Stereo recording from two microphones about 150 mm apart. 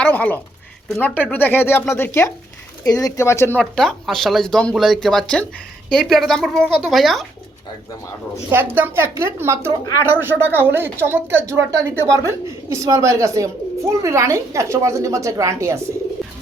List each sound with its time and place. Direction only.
0.0 s speech: 10° left (ahead or behind)
3.6 s speech: centre (ahead or behind)
8.7 s speech: 15° right (ahead or behind)
16.2 s a sound: centre (ahead or behind)